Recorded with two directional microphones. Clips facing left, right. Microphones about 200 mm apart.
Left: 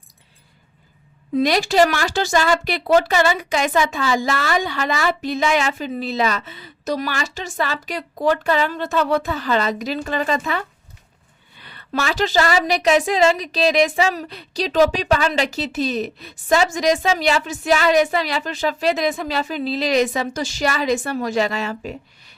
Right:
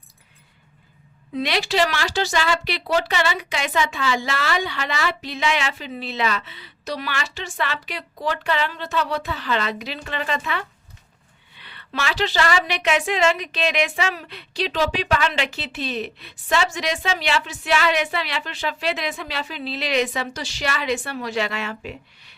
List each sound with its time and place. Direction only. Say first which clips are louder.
1.4 s a woman's voice: left 6 dB; 45° left (ahead or behind)